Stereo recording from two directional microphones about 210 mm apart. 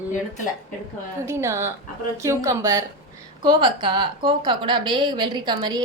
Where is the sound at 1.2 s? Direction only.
15° right (ahead or behind).